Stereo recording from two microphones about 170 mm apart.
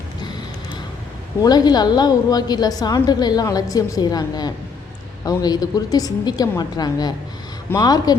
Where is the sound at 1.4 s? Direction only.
25° left (ahead or behind).